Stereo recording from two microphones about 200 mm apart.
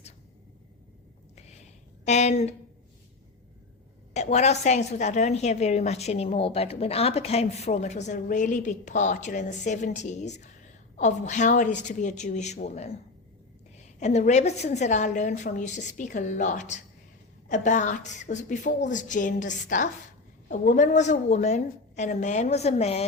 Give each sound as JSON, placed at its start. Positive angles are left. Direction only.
{"t": 2.0, "sound": "a woman's voice", "side_deg": 35}
{"t": 4.1, "sound": "a woman's voice", "side_deg": 35}